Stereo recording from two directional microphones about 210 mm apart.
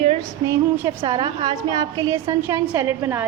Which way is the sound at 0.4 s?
15° right (ahead or behind).